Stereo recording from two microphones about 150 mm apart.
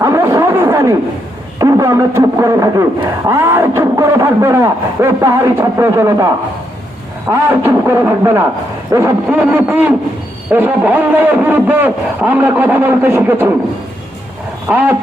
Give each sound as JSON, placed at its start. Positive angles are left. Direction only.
{"t": 0.0, "sound": "a sound", "side_deg": -20}
{"t": 1.5, "sound": "a man's voice", "side_deg": -20}
{"t": 14.7, "sound": "a man's voice", "side_deg": -10}